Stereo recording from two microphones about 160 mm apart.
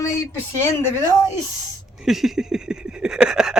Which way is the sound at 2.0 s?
Centre (ahead or behind).